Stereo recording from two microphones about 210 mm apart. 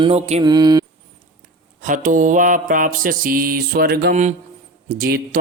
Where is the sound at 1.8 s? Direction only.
40° right (ahead or behind).